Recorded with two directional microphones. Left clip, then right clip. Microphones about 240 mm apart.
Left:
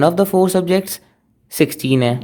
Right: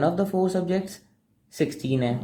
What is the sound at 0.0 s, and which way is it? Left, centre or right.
Speech, left.